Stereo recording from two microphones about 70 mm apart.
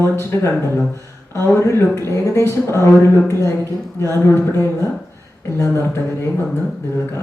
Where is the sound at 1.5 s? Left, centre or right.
Left.